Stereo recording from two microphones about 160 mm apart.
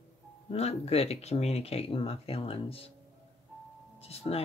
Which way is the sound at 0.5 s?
40° left (ahead or behind).